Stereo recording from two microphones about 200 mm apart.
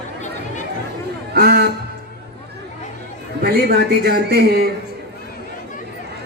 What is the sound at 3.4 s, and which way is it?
A man's voice, 50° right (ahead or behind).